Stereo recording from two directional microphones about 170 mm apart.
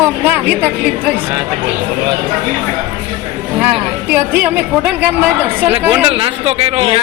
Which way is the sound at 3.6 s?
10° right (ahead or behind).